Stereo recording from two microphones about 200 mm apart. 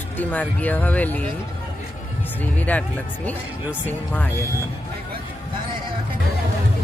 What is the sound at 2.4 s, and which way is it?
Speech, 10° left (ahead or behind).